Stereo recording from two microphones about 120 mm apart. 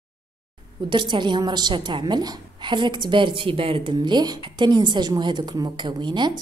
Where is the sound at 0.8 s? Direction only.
40° right (ahead or behind).